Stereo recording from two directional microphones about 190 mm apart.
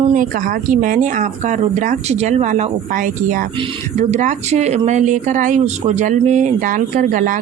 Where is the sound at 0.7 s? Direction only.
45° right (ahead or behind).